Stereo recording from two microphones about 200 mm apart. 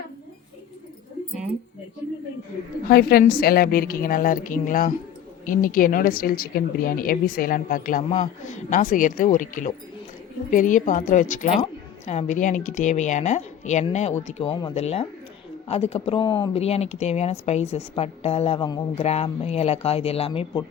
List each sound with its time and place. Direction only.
2.9 s a woman's voice: 50° left (ahead or behind); by 20.7 s 25° left (ahead or behind)